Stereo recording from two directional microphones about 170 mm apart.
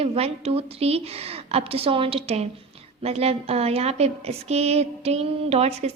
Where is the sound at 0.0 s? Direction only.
35° right (ahead or behind).